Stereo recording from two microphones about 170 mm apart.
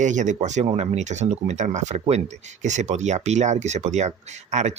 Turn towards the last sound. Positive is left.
turn(degrees=-45)  # may be behind; listen again after turning